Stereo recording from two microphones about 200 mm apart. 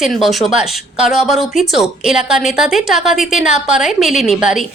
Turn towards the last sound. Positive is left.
turn(degrees=0)  # may be behind; listen again after turning